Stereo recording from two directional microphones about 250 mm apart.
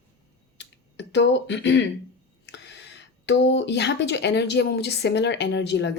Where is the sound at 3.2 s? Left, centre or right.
Left.